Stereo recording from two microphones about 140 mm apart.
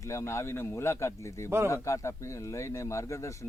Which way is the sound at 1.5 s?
15° right (ahead or behind).